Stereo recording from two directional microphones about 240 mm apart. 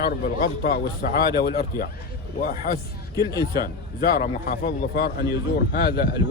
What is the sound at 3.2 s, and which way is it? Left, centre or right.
Speech, centre.